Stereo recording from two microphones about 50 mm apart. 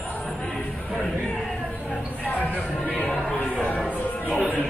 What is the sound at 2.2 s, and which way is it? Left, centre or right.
Speech, left.